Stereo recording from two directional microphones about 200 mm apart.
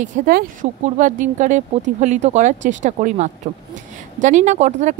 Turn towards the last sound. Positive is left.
turn(degrees=-35)  # may be behind; listen again after turning